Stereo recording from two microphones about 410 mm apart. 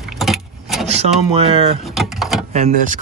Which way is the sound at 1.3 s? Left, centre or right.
Centre.